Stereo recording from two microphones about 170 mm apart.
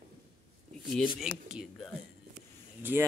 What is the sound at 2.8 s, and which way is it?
Speech, 10° right (ahead or behind).